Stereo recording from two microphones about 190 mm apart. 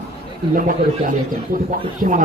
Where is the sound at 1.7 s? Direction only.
45° right (ahead or behind).